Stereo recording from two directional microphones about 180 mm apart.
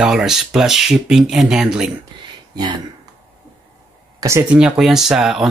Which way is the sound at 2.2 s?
25° right (ahead or behind).